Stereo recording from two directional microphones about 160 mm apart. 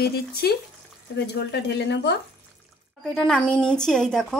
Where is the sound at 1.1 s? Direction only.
90° left.